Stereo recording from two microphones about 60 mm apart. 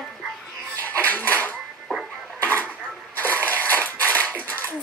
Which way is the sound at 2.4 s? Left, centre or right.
Left.